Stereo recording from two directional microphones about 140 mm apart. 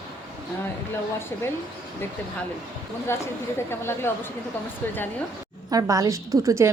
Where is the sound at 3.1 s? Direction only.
15° left (ahead or behind).